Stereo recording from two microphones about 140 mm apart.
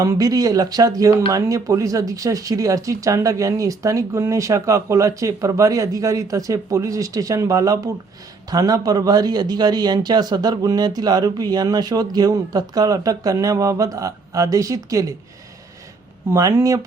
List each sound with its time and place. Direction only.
0.0 s speech: 25° right (ahead or behind)
16.3 s speech: 20° right (ahead or behind)